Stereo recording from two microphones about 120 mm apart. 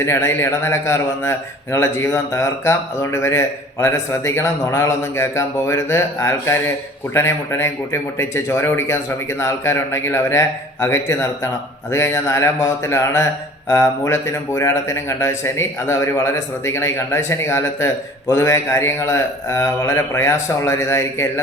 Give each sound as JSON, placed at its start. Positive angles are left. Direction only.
{"t": 0.0, "sound": "a man's voice", "side_deg": 20}